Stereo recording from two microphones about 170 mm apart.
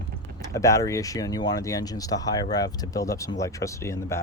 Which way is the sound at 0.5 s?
20° left (ahead or behind).